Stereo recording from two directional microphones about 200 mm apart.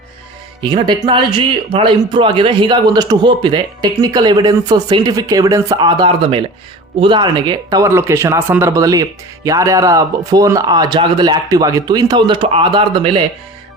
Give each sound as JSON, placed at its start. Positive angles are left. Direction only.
{"t": 0.6, "sound": "speech", "side_deg": -20}